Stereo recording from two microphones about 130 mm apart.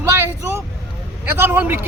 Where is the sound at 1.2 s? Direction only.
15° right (ahead or behind).